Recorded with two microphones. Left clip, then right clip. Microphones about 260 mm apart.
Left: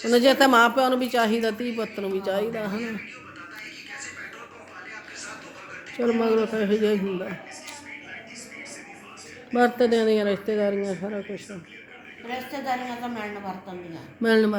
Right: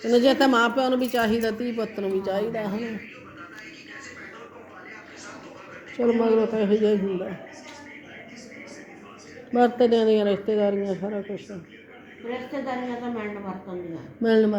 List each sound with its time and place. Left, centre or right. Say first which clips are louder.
0.1 s a woman's voice: left 1 dB; left
6.0 s speech: right 2 dB; centre
9.5 s speech: right 1 dB; centre
12.3 s a woman's voice: left 1 dB; left
13.9 s a woman's voice: even; centre